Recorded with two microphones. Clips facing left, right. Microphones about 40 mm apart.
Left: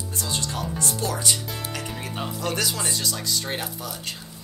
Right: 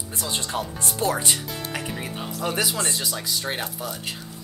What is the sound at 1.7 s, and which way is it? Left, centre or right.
Speech, centre.